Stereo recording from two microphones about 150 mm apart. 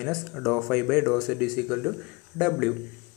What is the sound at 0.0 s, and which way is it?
Speech, centre (ahead or behind).